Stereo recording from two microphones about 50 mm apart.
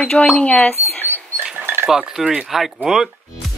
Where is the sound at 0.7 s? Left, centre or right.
Left.